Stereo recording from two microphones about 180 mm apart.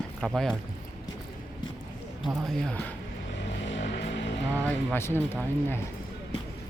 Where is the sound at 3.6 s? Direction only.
90° left.